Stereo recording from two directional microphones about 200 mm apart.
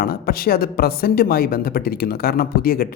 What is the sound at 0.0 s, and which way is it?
Speech, 50° left (ahead or behind).